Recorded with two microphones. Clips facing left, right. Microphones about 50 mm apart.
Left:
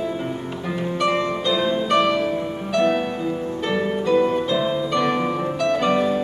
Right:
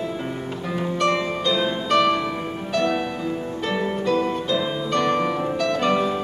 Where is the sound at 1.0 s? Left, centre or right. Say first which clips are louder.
Left 1 dB; centre.